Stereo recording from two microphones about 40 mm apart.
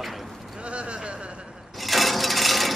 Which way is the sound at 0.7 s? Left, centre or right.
Right.